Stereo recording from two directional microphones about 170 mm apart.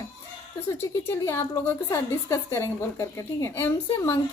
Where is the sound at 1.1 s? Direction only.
15° left (ahead or behind).